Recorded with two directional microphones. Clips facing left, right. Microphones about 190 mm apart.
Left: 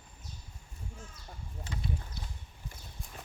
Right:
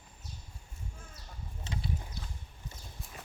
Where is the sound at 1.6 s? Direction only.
25° right (ahead or behind).